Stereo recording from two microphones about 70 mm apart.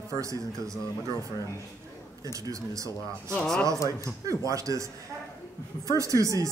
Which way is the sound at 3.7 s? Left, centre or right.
Left.